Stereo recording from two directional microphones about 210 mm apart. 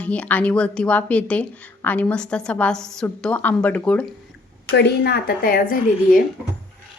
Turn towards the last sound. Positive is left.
turn(degrees=45)  # may be behind; listen again after turning